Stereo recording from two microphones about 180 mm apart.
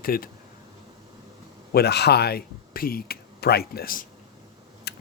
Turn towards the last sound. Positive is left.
turn(degrees=65)  # may be behind; listen again after turning